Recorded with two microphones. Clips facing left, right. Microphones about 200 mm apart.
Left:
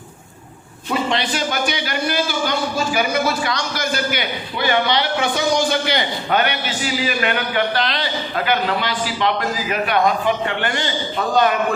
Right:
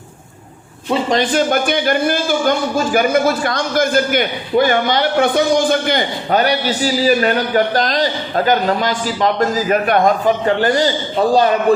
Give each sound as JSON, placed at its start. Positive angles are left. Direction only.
{"t": 1.1, "sound": "speech", "side_deg": -50}